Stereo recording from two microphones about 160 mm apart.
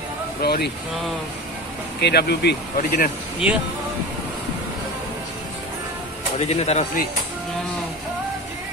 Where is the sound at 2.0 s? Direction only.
90° left; by 3.1 s 75° left (ahead or behind).